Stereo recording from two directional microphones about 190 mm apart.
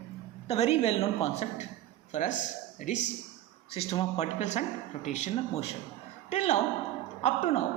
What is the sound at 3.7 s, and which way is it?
A man's voice, 30° left (ahead or behind).